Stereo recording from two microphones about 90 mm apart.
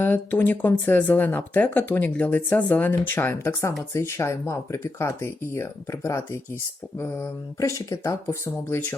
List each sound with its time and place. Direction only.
0.0 s speech: 25° left (ahead or behind)